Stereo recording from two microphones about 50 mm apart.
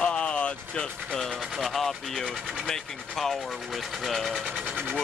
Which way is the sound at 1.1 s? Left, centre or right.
Centre.